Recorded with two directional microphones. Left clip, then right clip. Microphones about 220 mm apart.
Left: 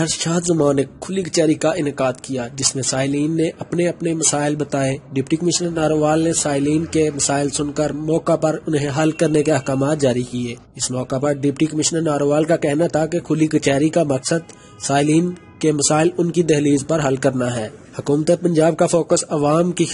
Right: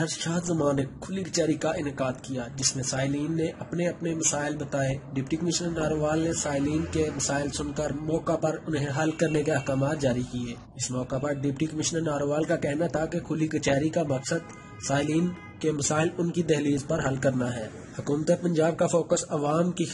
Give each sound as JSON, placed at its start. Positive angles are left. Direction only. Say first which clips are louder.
{"t": 0.0, "sound": "speech", "louder": "left 10 dB", "side_deg": 45}